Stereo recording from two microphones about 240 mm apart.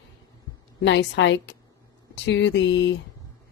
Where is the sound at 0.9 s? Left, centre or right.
Left.